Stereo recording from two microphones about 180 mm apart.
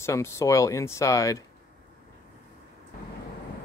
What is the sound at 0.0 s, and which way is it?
Speech, 15° left (ahead or behind).